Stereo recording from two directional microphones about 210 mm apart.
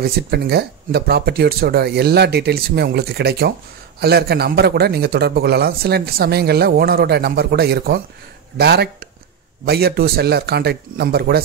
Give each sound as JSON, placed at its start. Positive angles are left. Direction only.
{"t": 0.0, "sound": "speech", "side_deg": -45}